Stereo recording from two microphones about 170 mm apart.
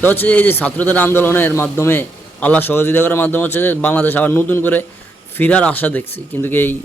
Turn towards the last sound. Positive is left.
turn(degrees=10)  # may be behind; listen again after turning